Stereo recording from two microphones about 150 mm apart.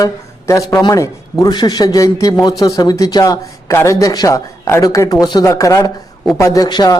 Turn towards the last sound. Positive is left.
turn(degrees=30)  # may be behind; listen again after turning